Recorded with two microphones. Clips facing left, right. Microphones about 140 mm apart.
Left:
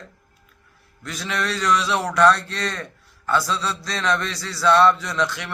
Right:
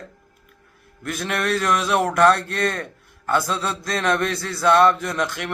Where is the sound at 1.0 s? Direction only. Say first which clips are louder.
Right 3 dB; 55° right (ahead or behind).